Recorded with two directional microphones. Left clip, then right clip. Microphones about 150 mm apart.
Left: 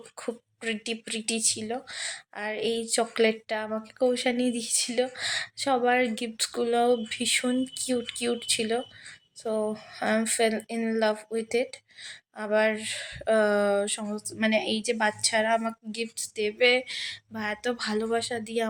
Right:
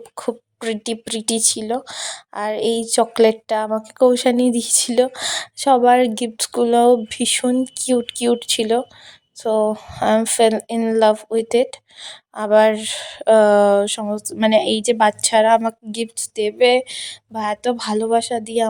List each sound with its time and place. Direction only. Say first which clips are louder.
0.2 s speech: right 10 dB; 55° right (ahead or behind)